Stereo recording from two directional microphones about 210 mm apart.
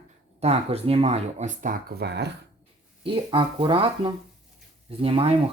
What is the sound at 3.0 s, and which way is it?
Speech, 25° right (ahead or behind).